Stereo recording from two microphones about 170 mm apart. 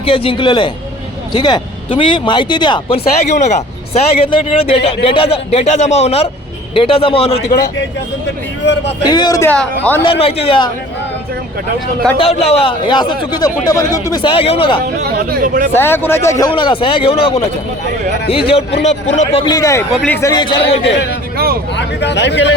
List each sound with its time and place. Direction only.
0.0 s a man's voice: 35° left (ahead or behind)
3.3 s speech: 45° left (ahead or behind)
4.2 s a man's voice: 30° left (ahead or behind)
8.6 s speech: 90° left
9.0 s speech: 25° left (ahead or behind)
10.0 s a man's voice: 35° left (ahead or behind)
12.1 s speech: 35° left (ahead or behind)
15.0 s speech: 60° right (ahead or behind)
15.7 s speech: 15° left (ahead or behind)
16.5 s a man's voice: 30° left (ahead or behind); by 19.4 s 45° left (ahead or behind)
19.4 s a man's voice: 25° left (ahead or behind)
21.3 s a sound: 65° right (ahead or behind)
21.8 s speech: 90° left